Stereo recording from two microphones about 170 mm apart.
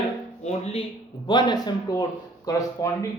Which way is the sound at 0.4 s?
40° left (ahead or behind).